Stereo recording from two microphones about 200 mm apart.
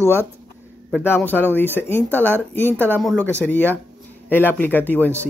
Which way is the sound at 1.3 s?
Centre (ahead or behind).